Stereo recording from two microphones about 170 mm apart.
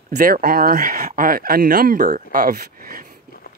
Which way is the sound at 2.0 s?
50° right (ahead or behind).